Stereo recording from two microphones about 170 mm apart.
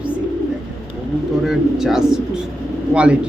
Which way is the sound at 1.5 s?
Centre (ahead or behind).